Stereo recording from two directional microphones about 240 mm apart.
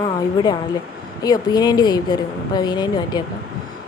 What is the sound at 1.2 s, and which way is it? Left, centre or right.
A woman's voice, centre.